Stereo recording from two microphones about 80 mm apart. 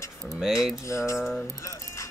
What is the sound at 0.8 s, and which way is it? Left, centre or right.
Speech, left.